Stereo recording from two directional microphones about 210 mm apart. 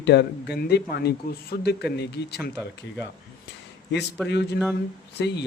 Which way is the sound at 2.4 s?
10° right (ahead or behind).